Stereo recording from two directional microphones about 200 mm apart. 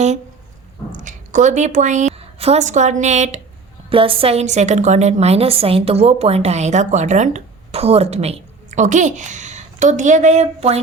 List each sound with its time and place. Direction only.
0.9 s a woman's voice: 40° right (ahead or behind)